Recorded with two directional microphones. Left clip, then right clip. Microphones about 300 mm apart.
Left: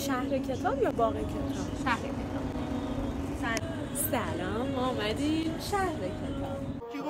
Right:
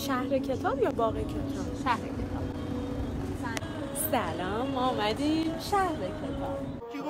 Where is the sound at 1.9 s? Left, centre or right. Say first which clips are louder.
Right 2 dB; right.